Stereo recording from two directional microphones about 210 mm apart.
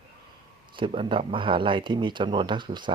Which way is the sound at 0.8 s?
25° right (ahead or behind).